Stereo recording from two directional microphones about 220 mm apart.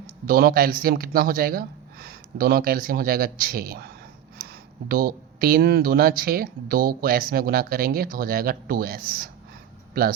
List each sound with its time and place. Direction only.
0.3 s speech: 40° right (ahead or behind)